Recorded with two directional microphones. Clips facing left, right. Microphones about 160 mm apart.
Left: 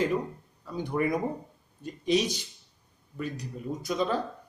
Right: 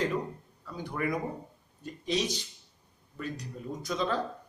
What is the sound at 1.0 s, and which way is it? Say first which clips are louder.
Speech: left 5 dB; 25° left (ahead or behind).